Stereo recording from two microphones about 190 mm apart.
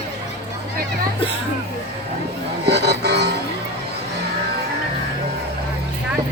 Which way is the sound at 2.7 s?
60° right (ahead or behind).